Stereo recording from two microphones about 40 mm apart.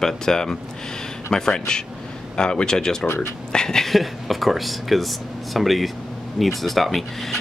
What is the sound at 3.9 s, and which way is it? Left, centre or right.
Speech, centre.